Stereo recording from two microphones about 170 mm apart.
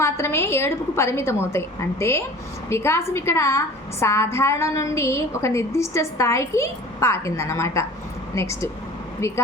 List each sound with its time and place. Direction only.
0.0 s a woman's voice: 15° left (ahead or behind)